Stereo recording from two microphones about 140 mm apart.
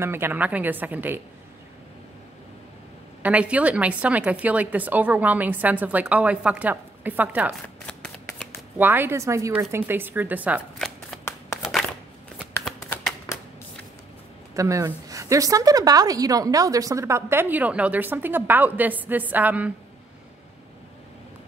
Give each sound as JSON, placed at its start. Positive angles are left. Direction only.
{"t": 0.0, "sound": "a woman's voice", "side_deg": -15}
{"t": 3.2, "sound": "a woman's voice", "side_deg": -10}
{"t": 7.8, "sound": "shuffling cards", "side_deg": 5}
{"t": 8.7, "sound": "a woman's voice", "side_deg": -15}
{"t": 10.8, "sound": "shuffling cards", "side_deg": 5}
{"t": 14.5, "sound": "a woman's voice", "side_deg": -25}